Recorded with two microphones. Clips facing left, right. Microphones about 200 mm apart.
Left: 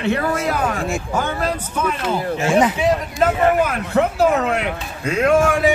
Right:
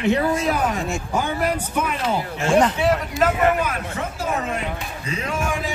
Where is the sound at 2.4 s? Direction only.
5° left (ahead or behind).